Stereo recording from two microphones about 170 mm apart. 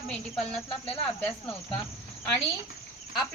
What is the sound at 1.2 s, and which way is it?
Speech, 15° left (ahead or behind).